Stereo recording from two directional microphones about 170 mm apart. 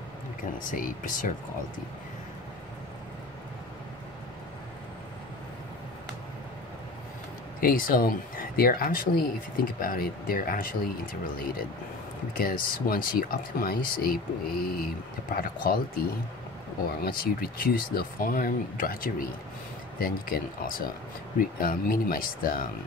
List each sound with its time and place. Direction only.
0.4 s speech: 55° left (ahead or behind)
7.6 s speech: 55° left (ahead or behind)
12.4 s speech: 60° left (ahead or behind)